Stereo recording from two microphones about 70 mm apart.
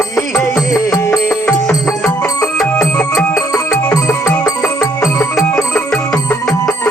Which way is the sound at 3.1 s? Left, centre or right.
Left.